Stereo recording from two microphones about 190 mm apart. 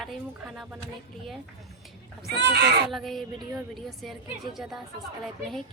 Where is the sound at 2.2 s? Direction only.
60° right (ahead or behind).